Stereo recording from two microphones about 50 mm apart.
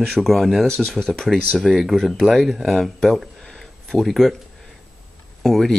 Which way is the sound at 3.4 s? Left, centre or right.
Centre.